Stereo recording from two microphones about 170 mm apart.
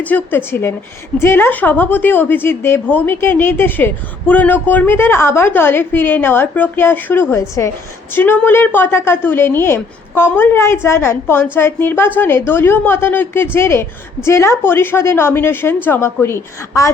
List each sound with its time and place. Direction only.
0.0 s a woman's voice: 10° left (ahead or behind)